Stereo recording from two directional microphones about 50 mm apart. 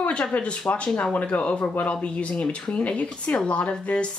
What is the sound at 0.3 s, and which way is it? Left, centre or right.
Speech, left.